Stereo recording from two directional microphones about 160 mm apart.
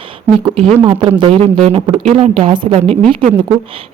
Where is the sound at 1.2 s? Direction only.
40° right (ahead or behind).